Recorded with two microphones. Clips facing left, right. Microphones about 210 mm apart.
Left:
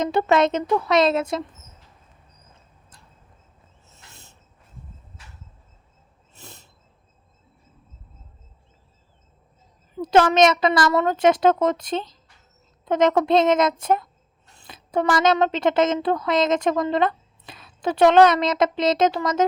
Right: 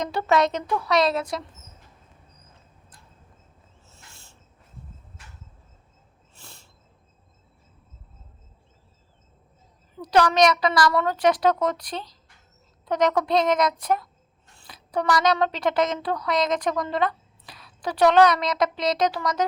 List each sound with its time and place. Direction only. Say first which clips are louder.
0.0 s speech: left 3 dB; 25° left (ahead or behind)
3.8 s a sound: left 2 dB; 20° left (ahead or behind)
10.0 s speech: left 3 dB; 25° left (ahead or behind)